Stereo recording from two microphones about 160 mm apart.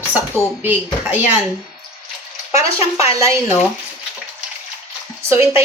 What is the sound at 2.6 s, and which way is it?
Speech, 20° right (ahead or behind).